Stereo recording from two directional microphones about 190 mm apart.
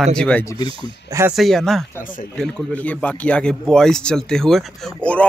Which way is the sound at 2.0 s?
45° left (ahead or behind).